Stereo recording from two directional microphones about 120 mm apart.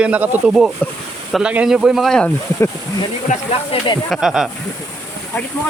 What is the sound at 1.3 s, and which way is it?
Speech, 5° right (ahead or behind).